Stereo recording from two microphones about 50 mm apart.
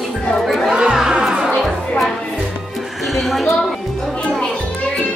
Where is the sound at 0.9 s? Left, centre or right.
Centre.